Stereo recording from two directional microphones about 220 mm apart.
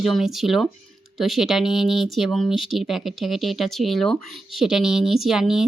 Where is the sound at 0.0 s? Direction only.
Centre (ahead or behind).